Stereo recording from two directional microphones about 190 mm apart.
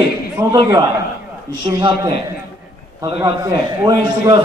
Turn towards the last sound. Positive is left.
turn(degrees=-20)  # may be behind; listen again after turning